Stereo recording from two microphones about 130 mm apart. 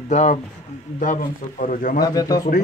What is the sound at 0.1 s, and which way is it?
Speech, 65° left (ahead or behind).